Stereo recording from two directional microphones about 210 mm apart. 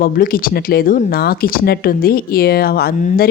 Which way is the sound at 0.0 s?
45° left (ahead or behind).